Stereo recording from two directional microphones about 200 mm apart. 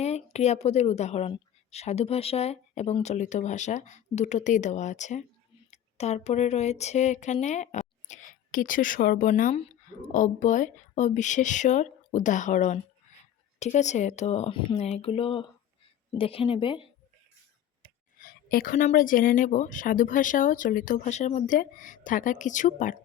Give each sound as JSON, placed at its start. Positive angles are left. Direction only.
{"t": 0.0, "sound": "a woman's voice", "side_deg": 35}
{"t": 18.2, "sound": "a woman's voice", "side_deg": 45}